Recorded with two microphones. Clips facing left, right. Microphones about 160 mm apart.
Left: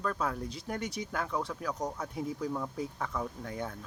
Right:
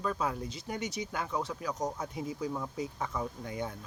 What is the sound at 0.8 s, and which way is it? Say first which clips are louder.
Speech: right 1 dB; 90° right.